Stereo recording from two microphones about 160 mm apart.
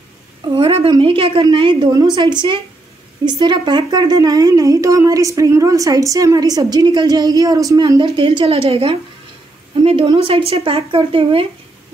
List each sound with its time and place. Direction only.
0.6 s speech: 35° right (ahead or behind)